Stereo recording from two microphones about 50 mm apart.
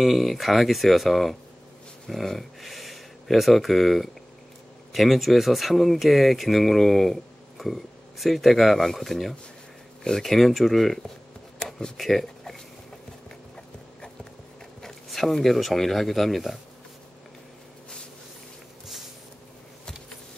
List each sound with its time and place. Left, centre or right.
0.0 s speech: centre
14.8 s speech: centre